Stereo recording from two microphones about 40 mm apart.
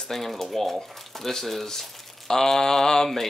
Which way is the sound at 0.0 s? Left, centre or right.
Centre.